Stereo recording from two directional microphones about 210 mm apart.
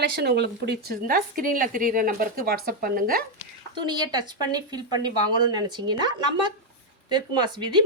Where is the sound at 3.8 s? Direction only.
20° right (ahead or behind).